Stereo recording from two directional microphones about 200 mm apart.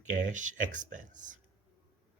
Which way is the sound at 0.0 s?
40° right (ahead or behind).